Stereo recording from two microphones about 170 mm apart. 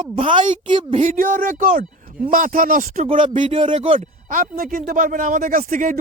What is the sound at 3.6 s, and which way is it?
Speech, 30° right (ahead or behind).